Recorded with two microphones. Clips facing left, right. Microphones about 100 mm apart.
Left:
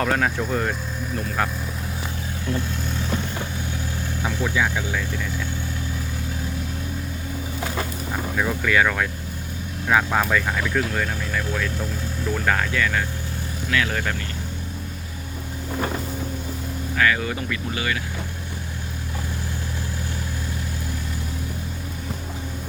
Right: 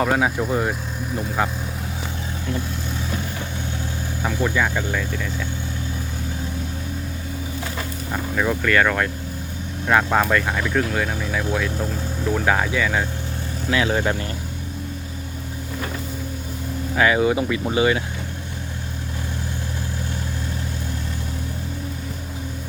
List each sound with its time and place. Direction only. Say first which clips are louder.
0.0 s speech: right 2 dB; 10° right (ahead or behind)
4.2 s speech: right 3 dB; 10° right (ahead or behind)
4.5 s speech: right 1 dB; 5° left (ahead or behind)
8.4 s speech: right 2 dB; 5° left (ahead or behind); by 14.2 s 20° right (ahead or behind)
17.0 s speech: right 5 dB; 20° right (ahead or behind)